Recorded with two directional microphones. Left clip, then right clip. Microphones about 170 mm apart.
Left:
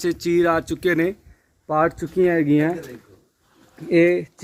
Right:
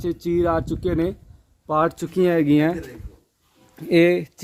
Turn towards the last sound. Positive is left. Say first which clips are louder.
# even
turn(degrees=-30)  # may be behind; listen again after turning